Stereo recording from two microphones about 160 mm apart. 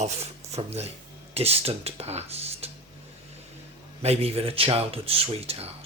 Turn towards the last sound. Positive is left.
turn(degrees=-40)  # may be behind; listen again after turning